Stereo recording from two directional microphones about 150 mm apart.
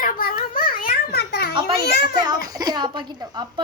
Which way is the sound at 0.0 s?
70° left (ahead or behind).